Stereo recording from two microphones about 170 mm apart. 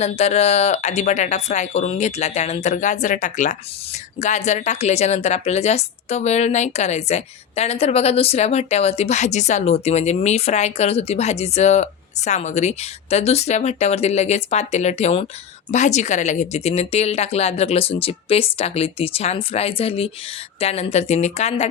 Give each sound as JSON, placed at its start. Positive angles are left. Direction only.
{"t": 0.0, "sound": "a woman's voice", "side_deg": 40}